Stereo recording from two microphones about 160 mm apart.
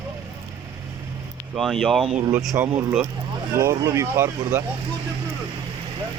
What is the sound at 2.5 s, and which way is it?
Speech, 20° right (ahead or behind).